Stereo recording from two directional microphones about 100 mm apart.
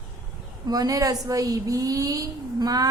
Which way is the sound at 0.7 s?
40° right (ahead or behind).